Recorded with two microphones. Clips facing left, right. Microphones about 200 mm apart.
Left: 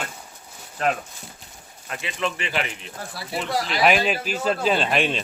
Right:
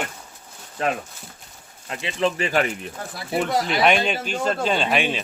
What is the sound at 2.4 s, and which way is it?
Speech, 45° right (ahead or behind).